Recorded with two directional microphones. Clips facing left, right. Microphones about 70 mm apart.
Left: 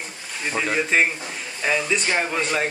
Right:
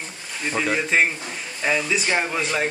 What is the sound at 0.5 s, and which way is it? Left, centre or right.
Speech, centre.